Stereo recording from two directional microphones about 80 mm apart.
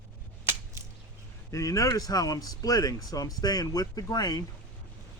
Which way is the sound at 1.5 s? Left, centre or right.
Left.